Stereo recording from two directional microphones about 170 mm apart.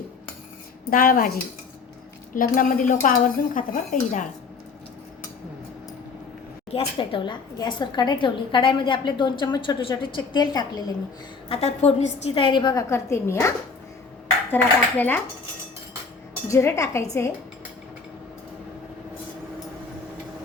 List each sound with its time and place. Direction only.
0.9 s speech: 55° left (ahead or behind)
2.3 s a woman's voice: 50° left (ahead or behind)
6.7 s a woman's voice: 35° left (ahead or behind)
11.4 s a woman's voice: 35° left (ahead or behind); by 13.5 s 15° left (ahead or behind)
14.5 s speech: 10° left (ahead or behind)
16.5 s speech: 15° left (ahead or behind)